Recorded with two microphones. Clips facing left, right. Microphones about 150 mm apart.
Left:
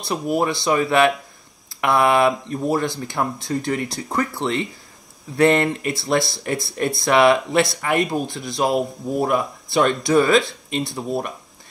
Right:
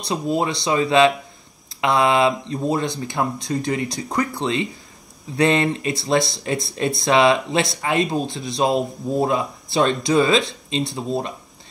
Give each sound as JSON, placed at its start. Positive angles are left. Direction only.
{"t": 0.0, "sound": "speech", "side_deg": -20}